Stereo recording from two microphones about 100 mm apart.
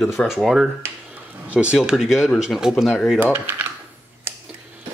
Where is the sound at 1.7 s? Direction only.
Centre (ahead or behind).